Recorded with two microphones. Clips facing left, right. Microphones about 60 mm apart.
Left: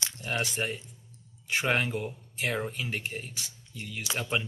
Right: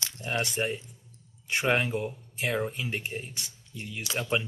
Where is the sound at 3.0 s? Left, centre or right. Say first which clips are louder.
Right 1 dB; centre.